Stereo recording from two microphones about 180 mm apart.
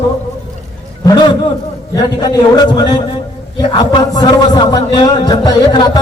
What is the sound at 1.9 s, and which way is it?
A man's voice, 20° left (ahead or behind).